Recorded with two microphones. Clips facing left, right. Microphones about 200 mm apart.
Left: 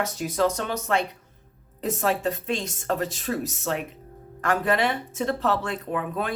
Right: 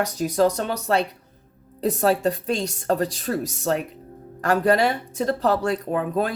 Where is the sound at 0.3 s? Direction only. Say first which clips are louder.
Right 4 dB; 35° right (ahead or behind).